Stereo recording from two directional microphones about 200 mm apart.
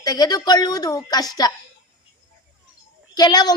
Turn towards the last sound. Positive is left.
turn(degrees=20)  # may be behind; listen again after turning